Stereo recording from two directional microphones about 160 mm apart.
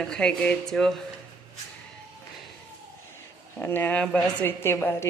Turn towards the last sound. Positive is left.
turn(degrees=15)  # may be behind; listen again after turning